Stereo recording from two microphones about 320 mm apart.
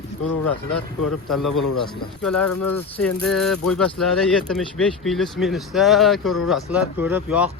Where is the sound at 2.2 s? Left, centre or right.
Centre.